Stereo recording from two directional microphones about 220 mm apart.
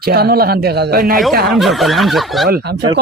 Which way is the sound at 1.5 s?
Centre (ahead or behind).